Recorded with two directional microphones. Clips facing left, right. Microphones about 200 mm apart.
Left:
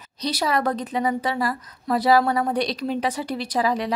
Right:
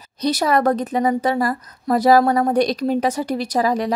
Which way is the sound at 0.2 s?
50° right (ahead or behind).